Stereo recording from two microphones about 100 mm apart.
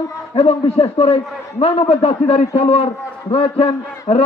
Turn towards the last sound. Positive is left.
turn(degrees=75)  # may be behind; listen again after turning